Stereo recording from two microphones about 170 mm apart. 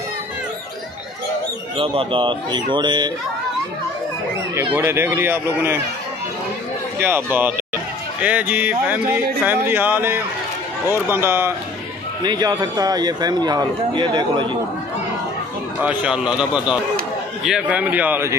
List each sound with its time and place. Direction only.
1.8 s a man's voice: 30° right (ahead or behind)
4.7 s speech: 15° right (ahead or behind)
7.0 s a man's voice: 15° right (ahead or behind)
12.2 s a man's voice: 25° right (ahead or behind)
15.8 s speech: 10° right (ahead or behind)